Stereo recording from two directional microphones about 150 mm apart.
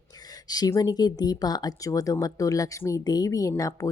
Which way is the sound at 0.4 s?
25° left (ahead or behind).